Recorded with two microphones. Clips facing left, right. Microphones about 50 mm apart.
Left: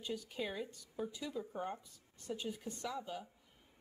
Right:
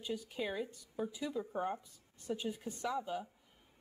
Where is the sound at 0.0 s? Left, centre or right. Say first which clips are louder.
Right 2 dB; centre.